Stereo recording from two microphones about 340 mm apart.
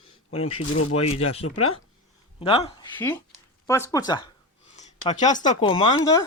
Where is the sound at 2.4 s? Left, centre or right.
Centre.